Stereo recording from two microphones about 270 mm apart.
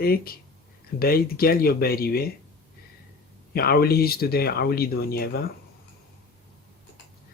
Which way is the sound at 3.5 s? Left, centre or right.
Left.